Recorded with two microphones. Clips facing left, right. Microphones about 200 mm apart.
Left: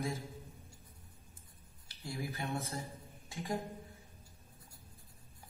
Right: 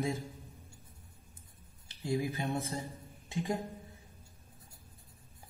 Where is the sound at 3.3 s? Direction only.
20° right (ahead or behind).